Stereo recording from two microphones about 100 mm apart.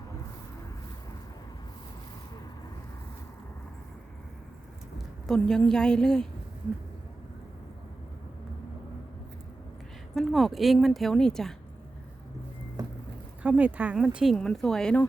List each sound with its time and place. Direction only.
5.2 s a woman's voice: 5° left (ahead or behind)
10.2 s speech: centre (ahead or behind)
12.8 s vehicle: 40° right (ahead or behind)
13.4 s speech: 15° right (ahead or behind)
14.3 s a woman's voice: 5° left (ahead or behind)